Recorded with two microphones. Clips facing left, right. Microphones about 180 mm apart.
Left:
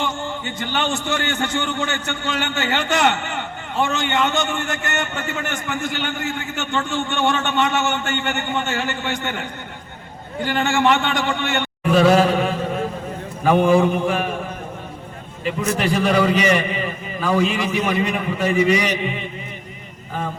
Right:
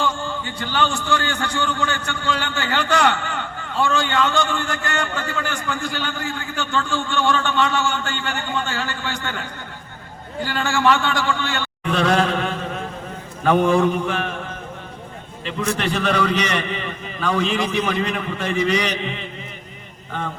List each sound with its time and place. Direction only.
0.0 s a man's voice: 20° left (ahead or behind)
11.9 s chant: 5° left (ahead or behind)
13.4 s a man's voice: 10° left (ahead or behind)
15.4 s a man's voice: 10° left (ahead or behind)